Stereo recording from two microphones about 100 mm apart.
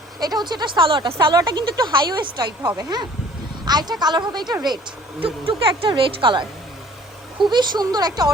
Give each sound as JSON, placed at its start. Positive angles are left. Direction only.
{"t": 0.2, "sound": "speech", "side_deg": -45}
{"t": 1.4, "sound": "speech", "side_deg": -45}
{"t": 5.2, "sound": "a woman's voice", "side_deg": -65}
{"t": 7.3, "sound": "speech", "side_deg": -50}